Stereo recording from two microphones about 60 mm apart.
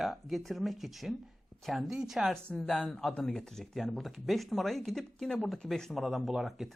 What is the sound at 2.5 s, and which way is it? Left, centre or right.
Speech, centre.